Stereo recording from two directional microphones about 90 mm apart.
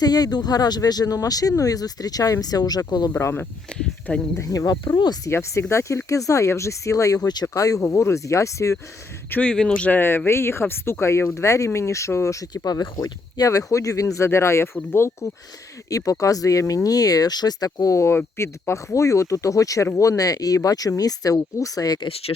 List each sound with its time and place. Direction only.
0.0 s speech: 45° left (ahead or behind)
3.2 s speech: 30° left (ahead or behind)
5.2 s speech: 30° left (ahead or behind)
9.3 s speech: 10° left (ahead or behind)
10.0 s speech: 25° left (ahead or behind); by 22.0 s 40° left (ahead or behind)
22.0 s speech: 90° left